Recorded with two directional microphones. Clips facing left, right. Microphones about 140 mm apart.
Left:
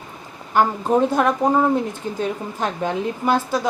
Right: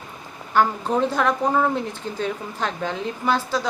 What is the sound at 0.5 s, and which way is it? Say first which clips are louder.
A woman's voice: left 3 dB; 15° left (ahead or behind).